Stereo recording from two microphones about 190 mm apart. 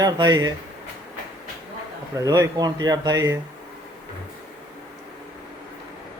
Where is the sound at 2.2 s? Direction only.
20° right (ahead or behind).